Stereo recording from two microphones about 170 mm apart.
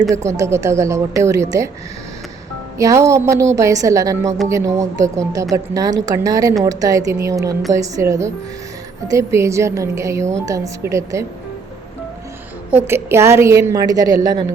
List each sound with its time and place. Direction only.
0.3 s a woman's voice: 15° right (ahead or behind)
2.7 s a woman's voice: 20° right (ahead or behind)
12.7 s a woman's voice: 15° right (ahead or behind)